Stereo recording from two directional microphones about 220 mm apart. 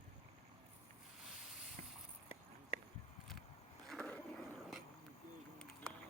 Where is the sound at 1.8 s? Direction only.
35° right (ahead or behind).